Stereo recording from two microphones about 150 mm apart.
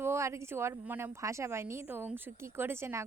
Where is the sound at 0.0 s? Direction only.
20° right (ahead or behind).